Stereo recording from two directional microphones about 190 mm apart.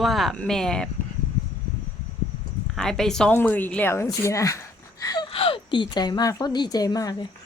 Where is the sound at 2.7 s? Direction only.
5° left (ahead or behind).